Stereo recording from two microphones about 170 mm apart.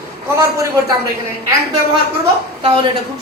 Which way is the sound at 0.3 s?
20° right (ahead or behind).